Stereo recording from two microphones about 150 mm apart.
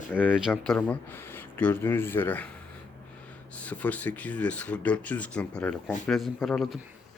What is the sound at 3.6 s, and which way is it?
Speech, 10° left (ahead or behind).